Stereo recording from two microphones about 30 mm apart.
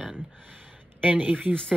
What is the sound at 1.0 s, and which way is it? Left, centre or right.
Speech, right.